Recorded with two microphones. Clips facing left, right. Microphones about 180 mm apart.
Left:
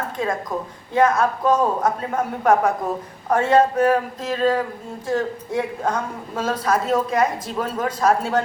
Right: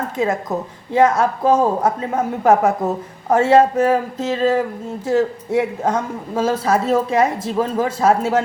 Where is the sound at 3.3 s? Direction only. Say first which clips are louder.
Right 4 dB; 25° right (ahead or behind).